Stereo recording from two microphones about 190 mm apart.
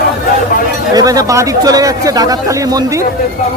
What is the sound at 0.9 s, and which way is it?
Speech, 20° right (ahead or behind).